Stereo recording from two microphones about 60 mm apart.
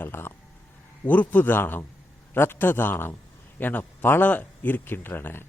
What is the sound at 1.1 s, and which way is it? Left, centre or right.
A man's voice, left.